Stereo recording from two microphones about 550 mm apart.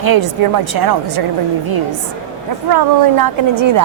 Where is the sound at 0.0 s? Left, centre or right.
Right.